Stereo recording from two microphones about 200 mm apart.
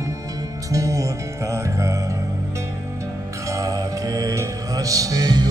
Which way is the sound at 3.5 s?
15° right (ahead or behind).